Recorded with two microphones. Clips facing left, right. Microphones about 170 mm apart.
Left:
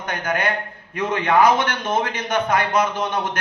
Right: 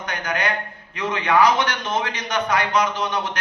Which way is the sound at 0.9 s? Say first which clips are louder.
Left 1 dB; 50° left (ahead or behind).